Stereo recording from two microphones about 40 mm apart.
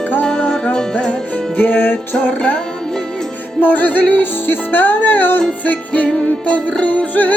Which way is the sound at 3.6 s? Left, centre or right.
Left.